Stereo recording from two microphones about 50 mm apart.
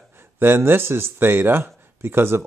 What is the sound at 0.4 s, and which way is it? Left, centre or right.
Speech, right.